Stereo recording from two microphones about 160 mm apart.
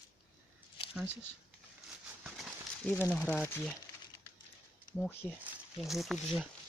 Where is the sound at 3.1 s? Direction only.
5° left (ahead or behind).